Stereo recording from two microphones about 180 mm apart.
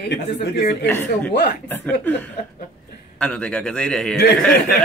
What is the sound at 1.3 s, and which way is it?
Speech, 65° left (ahead or behind).